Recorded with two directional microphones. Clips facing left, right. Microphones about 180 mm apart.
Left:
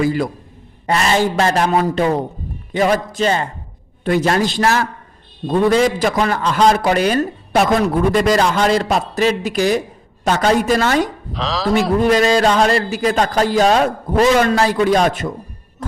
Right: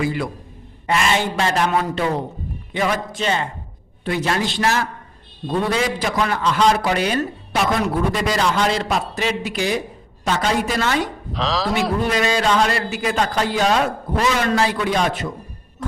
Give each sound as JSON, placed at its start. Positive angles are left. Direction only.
{"t": 0.0, "sound": "a man's voice", "side_deg": 40}
{"t": 11.3, "sound": "speech", "side_deg": 0}
{"t": 12.1, "sound": "a man's voice", "side_deg": 40}